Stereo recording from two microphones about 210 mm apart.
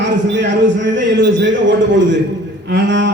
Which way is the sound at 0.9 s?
60° right (ahead or behind).